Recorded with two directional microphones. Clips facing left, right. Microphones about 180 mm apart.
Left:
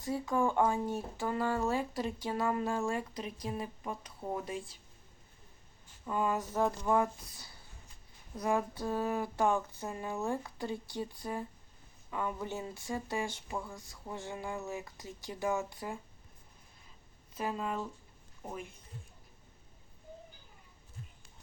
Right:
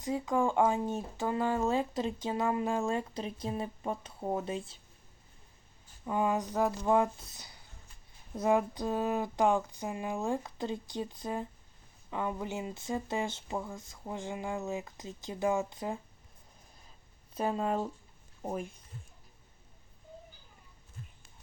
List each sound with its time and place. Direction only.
0.0 s speech: 15° right (ahead or behind)
6.1 s a sound: 20° right (ahead or behind)
6.8 s speech: 20° right (ahead or behind)
17.3 s speech: 35° right (ahead or behind)